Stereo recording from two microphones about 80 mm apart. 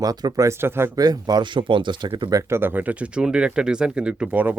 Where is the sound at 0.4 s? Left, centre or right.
Right.